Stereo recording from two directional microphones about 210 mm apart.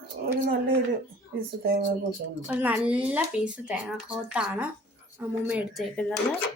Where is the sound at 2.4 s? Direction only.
5° right (ahead or behind).